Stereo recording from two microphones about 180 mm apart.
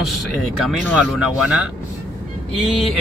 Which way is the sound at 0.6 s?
5° right (ahead or behind).